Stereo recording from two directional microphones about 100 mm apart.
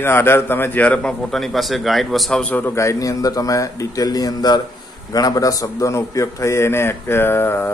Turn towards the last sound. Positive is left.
turn(degrees=20)  # may be behind; listen again after turning